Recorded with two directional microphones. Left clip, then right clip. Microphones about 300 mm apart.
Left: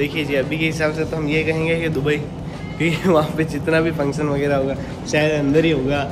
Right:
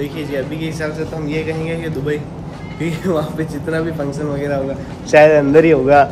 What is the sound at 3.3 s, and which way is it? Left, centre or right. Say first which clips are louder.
Speech: left 2 dB; centre.